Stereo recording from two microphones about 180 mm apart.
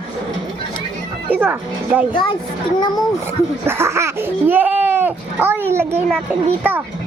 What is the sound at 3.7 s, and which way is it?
Speech, 15° right (ahead or behind).